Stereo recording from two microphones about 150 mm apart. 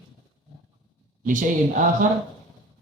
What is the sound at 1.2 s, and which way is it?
Speech, 60° right (ahead or behind).